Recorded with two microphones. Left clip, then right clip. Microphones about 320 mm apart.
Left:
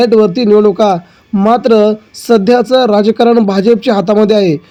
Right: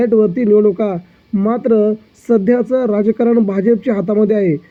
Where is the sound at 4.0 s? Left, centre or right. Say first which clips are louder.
Left 5 dB; centre.